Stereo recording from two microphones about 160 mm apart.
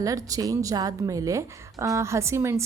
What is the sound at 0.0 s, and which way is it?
A woman's voice, 20° right (ahead or behind).